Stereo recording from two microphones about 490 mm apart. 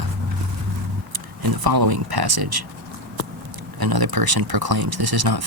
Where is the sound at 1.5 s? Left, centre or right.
Right.